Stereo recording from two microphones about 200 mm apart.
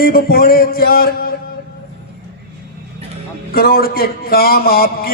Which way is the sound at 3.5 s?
50° left (ahead or behind).